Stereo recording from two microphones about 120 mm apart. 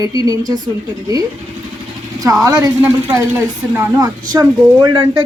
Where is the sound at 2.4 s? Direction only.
25° right (ahead or behind).